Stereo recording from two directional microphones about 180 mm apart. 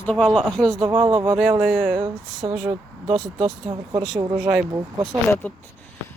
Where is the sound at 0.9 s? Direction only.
30° right (ahead or behind).